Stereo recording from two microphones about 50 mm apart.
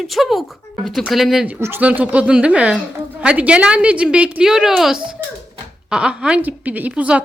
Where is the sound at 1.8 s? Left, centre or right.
Right.